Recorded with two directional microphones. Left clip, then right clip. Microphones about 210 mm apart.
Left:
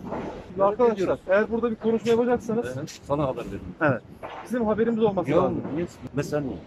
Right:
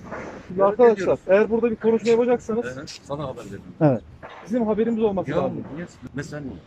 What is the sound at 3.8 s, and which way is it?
Speech, 20° right (ahead or behind).